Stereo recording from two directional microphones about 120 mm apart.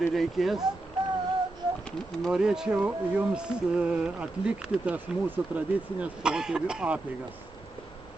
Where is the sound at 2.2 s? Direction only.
5° right (ahead or behind).